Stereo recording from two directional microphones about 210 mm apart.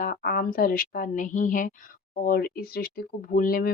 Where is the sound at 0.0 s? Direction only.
45° left (ahead or behind).